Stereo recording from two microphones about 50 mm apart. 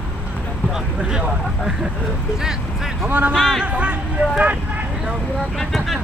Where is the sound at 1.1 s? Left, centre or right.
Right.